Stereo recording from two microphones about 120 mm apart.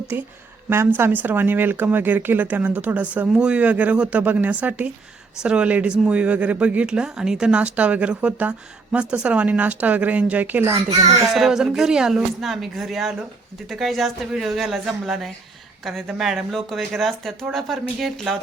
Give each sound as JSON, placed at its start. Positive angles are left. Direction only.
{"t": 0.1, "sound": "a child's voice", "side_deg": -20}
{"t": 11.3, "sound": "speech", "side_deg": -5}